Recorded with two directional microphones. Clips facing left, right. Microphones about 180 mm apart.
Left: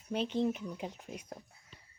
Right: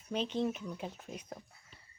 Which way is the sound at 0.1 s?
10° left (ahead or behind).